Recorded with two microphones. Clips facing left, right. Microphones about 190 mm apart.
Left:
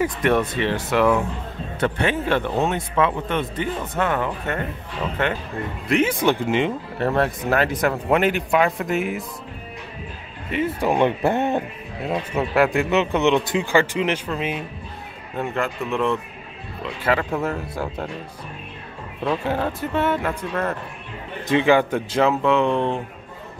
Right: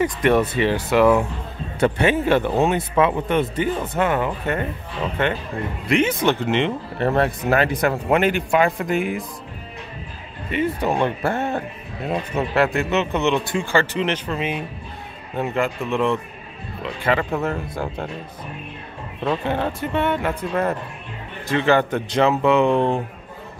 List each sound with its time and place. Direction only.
0.0 s speech: centre (ahead or behind)
5.9 s speech: 5° left (ahead or behind)
10.5 s speech: 5° left (ahead or behind)
12.3 s speech: 10° left (ahead or behind)
19.2 s speech: 5° left (ahead or behind)
21.5 s speech: 15° left (ahead or behind)
22.4 s speech: 5° right (ahead or behind)